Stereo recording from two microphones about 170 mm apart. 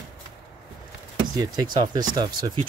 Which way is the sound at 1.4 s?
25° right (ahead or behind).